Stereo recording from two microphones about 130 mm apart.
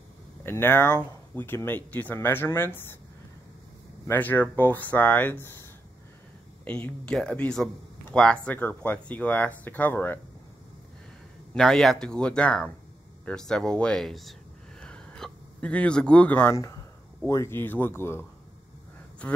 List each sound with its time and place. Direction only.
0.4 s speech: 20° left (ahead or behind)
4.1 s speech: 15° left (ahead or behind)
6.6 s speech: 10° left (ahead or behind)
11.5 s speech: 5° left (ahead or behind)
14.8 s a sound: 5° left (ahead or behind)
16.5 s speech: 25° left (ahead or behind)